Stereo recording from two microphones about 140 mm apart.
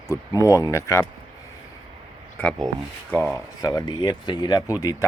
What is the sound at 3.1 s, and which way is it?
Speech, 15° left (ahead or behind).